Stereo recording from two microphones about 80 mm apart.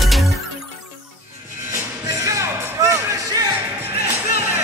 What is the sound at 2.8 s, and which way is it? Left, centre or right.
Music, right.